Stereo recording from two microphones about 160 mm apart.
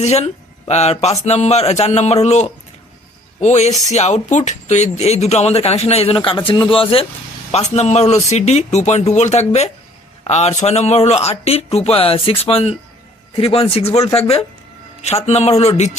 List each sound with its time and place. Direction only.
0.0 s speech: 45° left (ahead or behind)